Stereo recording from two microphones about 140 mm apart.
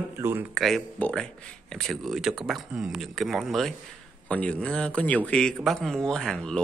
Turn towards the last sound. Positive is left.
turn(degrees=5)  # may be behind; listen again after turning